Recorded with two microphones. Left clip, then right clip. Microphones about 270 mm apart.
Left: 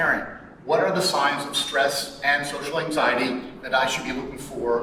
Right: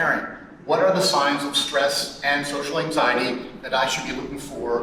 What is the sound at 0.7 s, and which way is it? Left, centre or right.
A man's voice, centre.